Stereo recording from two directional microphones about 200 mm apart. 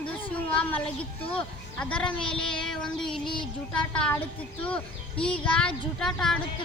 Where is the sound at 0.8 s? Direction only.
25° left (ahead or behind).